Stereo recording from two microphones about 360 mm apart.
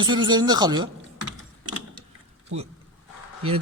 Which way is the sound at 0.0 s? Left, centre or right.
Centre.